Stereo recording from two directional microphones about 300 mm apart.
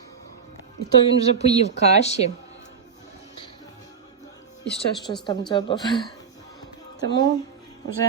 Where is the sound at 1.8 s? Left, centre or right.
Left.